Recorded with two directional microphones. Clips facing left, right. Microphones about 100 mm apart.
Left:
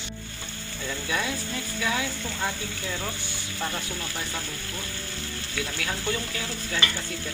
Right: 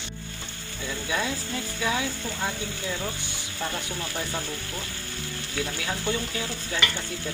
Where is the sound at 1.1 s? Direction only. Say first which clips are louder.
Right 1 dB; 20° right (ahead or behind).